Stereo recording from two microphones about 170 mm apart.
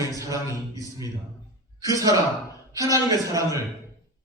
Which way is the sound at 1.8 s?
20° right (ahead or behind).